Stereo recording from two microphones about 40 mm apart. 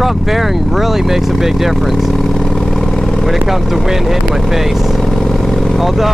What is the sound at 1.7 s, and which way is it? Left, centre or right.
Vehicle, centre.